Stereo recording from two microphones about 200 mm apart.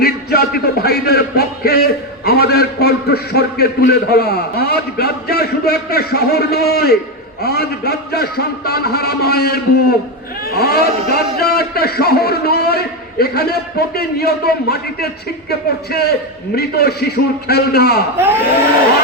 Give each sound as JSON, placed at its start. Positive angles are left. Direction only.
{"t": 0.0, "sound": "music", "side_deg": 50}
{"t": 7.4, "sound": "a man's voice", "side_deg": 50}